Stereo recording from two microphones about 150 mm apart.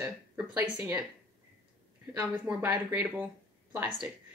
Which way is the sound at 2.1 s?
15° right (ahead or behind).